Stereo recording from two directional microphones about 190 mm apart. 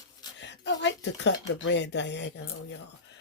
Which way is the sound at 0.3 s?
70° left (ahead or behind).